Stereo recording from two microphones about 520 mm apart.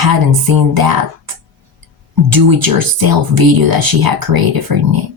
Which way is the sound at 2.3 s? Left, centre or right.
Right.